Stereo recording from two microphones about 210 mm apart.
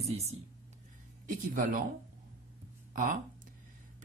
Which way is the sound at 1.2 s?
40° right (ahead or behind).